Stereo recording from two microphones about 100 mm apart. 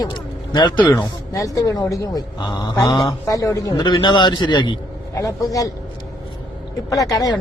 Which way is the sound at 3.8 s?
45° left (ahead or behind).